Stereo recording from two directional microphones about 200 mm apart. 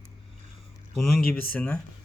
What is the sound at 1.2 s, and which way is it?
Speech, 45° left (ahead or behind).